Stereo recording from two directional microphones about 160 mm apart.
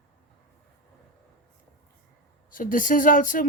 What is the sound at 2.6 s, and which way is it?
Speech, 60° left (ahead or behind).